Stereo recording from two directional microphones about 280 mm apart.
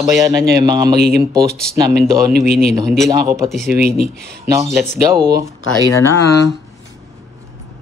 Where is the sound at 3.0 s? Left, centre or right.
Centre.